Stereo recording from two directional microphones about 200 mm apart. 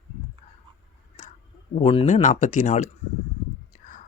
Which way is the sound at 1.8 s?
30° left (ahead or behind).